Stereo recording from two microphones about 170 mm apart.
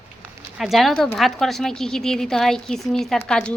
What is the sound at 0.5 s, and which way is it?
A woman's voice, centre (ahead or behind).